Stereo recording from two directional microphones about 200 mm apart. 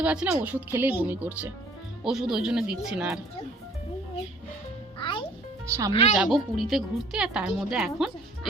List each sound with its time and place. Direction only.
0.0 s a woman's voice: 5° right (ahead or behind)
4.9 s music: 25° left (ahead or behind)
5.6 s speech: 15° right (ahead or behind)
5.9 s speech: 30° left (ahead or behind)
6.1 s a woman's voice: centre (ahead or behind)